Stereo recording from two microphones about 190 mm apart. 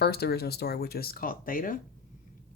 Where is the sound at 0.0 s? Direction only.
55° left (ahead or behind).